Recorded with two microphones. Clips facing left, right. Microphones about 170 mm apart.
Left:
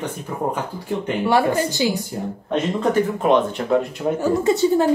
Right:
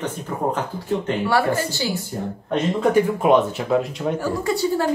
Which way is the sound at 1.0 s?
20° left (ahead or behind).